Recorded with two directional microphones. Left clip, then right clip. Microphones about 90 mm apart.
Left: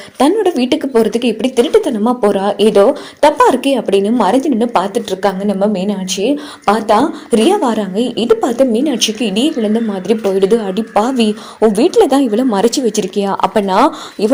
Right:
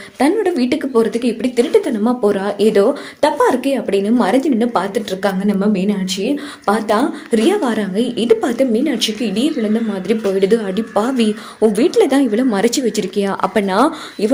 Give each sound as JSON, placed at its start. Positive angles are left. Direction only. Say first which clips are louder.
{"t": 0.4, "sound": "a woman's voice", "louder": "left 3 dB", "side_deg": 45}
{"t": 1.8, "sound": "a woman's voice", "louder": "left 3 dB", "side_deg": 35}
{"t": 4.0, "sound": "a woman's voice", "louder": "left 3 dB", "side_deg": 25}
{"t": 8.7, "sound": "a woman's voice", "louder": "left 3 dB", "side_deg": 40}
{"t": 10.1, "sound": "a woman's voice", "louder": "left 3 dB", "side_deg": 25}